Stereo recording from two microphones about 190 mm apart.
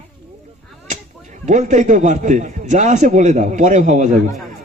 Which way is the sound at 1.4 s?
40° right (ahead or behind).